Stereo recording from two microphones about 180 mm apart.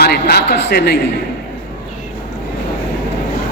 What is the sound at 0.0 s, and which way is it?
Speech, 60° left (ahead or behind).